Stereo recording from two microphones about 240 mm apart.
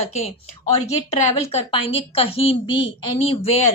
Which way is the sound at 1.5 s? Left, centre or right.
Left.